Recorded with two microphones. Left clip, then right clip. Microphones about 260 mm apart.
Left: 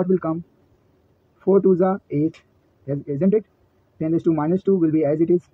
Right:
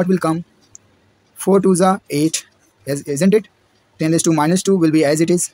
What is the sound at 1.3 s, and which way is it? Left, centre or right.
Speech, right.